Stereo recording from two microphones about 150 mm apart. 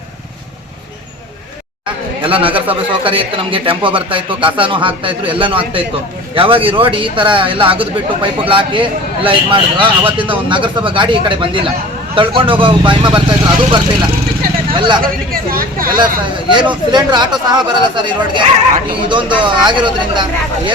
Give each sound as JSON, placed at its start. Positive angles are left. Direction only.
{"t": 2.2, "sound": "speech", "side_deg": -35}
{"t": 14.7, "sound": "speech", "side_deg": -35}
{"t": 15.3, "sound": "a woman's voice", "side_deg": -75}
{"t": 16.5, "sound": "speech", "side_deg": -30}